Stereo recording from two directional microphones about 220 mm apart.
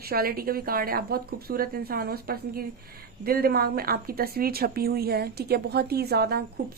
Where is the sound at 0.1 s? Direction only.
45° right (ahead or behind).